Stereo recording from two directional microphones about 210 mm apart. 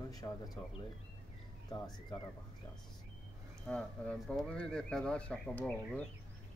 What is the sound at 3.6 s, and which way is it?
Speech, 5° left (ahead or behind).